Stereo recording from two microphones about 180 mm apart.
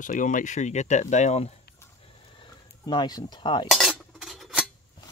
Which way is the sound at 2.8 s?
25° left (ahead or behind).